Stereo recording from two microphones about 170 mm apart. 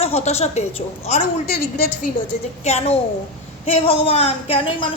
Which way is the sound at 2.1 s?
50° left (ahead or behind).